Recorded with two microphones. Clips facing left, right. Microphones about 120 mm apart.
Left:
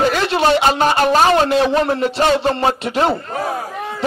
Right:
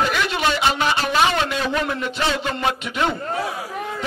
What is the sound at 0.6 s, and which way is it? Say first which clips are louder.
A man's voice: left 6 dB; 45° left (ahead or behind).